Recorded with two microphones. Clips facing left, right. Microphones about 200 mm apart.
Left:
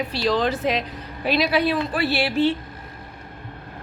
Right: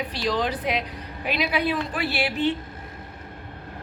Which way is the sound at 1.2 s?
35° left (ahead or behind).